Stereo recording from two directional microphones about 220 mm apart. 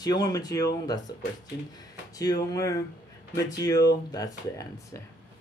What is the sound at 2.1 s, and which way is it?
Speech, 15° left (ahead or behind).